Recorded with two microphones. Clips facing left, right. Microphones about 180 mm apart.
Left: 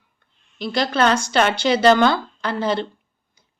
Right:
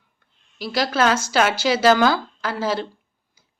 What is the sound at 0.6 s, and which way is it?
Speech, 5° right (ahead or behind).